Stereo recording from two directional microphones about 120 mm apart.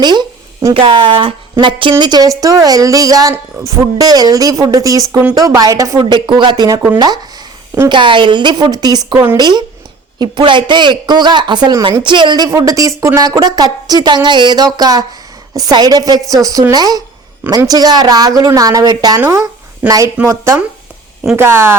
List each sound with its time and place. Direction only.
0.0 s a woman's voice: 35° right (ahead or behind)
6.0 s a woman's voice: 40° right (ahead or behind)
7.9 s a woman's voice: 40° right (ahead or behind)
9.1 s speech: 20° right (ahead or behind)
9.4 s a woman's voice: 35° right (ahead or behind)
12.5 s a woman's voice: 25° right (ahead or behind)
20.2 s speech: 25° right (ahead or behind)